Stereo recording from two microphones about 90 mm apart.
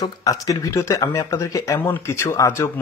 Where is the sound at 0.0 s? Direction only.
45° left (ahead or behind).